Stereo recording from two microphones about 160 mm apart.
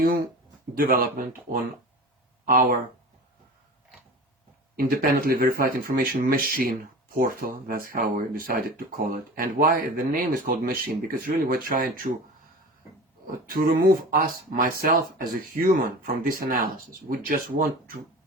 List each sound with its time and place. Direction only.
0.8 s speech: 65° right (ahead or behind)
2.5 s speech: 55° right (ahead or behind)
4.8 s speech: 65° right (ahead or behind)
13.2 s speech: 60° right (ahead or behind)